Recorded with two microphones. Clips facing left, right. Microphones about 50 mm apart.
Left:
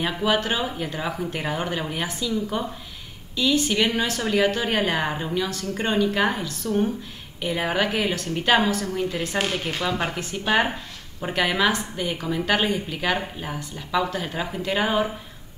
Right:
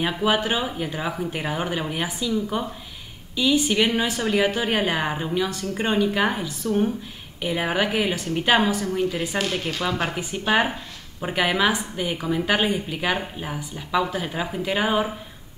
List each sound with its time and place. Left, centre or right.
0.2 s a woman's voice: centre
9.4 s speech: left
9.8 s a woman's voice: centre